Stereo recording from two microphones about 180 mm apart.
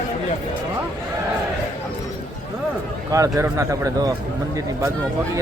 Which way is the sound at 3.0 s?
20° right (ahead or behind).